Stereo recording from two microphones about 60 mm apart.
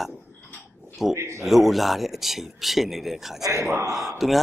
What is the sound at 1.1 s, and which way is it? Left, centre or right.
Speech, right.